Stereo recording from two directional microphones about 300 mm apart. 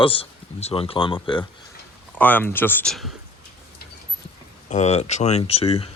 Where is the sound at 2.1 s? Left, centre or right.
Centre.